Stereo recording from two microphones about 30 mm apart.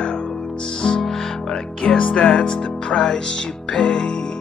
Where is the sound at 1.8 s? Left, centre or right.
Left.